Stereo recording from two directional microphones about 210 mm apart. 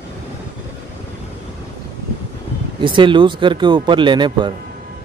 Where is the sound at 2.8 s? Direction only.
25° right (ahead or behind).